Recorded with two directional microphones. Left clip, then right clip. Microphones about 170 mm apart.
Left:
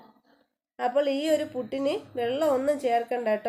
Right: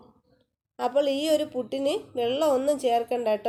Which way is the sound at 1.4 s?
35° right (ahead or behind).